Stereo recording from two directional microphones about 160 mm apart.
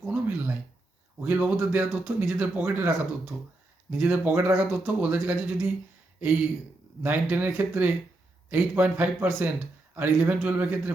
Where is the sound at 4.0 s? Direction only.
10° right (ahead or behind).